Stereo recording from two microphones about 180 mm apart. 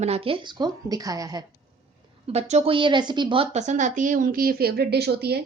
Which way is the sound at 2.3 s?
35° right (ahead or behind).